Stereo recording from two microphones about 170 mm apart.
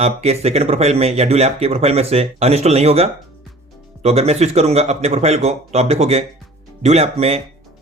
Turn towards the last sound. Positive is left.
turn(degrees=-40)  # may be behind; listen again after turning